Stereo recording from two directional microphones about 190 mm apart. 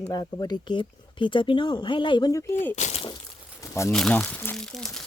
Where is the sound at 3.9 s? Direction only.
Centre (ahead or behind).